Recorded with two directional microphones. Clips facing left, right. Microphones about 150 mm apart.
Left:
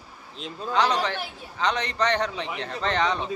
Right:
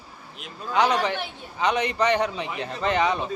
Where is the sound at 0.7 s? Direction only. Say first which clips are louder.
Right 2 dB; 10° right (ahead or behind).